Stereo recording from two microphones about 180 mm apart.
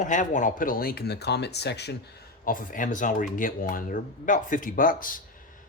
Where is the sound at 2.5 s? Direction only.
50° left (ahead or behind).